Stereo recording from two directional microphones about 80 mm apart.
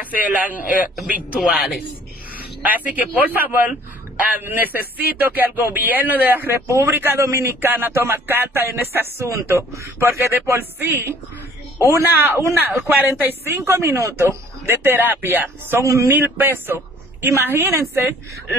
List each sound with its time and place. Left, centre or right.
0.2 s a man's voice: right
0.9 s speech: centre
2.3 s a man's voice: centre
12.5 s a man's voice: right
15.8 s a man's voice: right
16.1 s a man's voice: right